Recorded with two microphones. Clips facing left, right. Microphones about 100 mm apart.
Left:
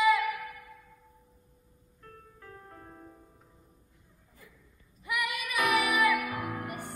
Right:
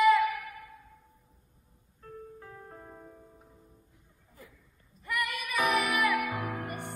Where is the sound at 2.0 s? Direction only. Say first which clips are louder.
Right 6 dB; 20° right (ahead or behind).